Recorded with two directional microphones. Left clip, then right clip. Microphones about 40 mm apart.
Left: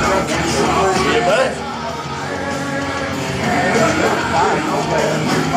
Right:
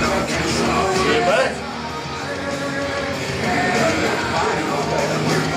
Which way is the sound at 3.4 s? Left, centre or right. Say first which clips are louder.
Left 3 dB; left.